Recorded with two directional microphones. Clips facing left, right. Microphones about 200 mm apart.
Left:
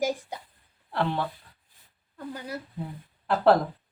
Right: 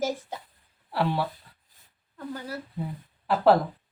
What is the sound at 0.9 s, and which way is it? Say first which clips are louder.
Speech: right 1 dB; 5° right (ahead or behind).